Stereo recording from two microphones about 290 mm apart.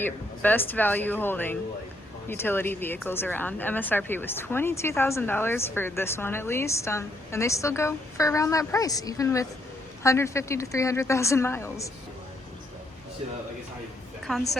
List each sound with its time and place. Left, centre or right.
0.0 s speech: centre
14.3 s a woman's voice: centre